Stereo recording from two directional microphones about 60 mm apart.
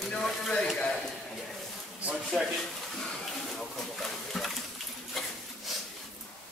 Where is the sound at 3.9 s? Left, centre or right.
Centre.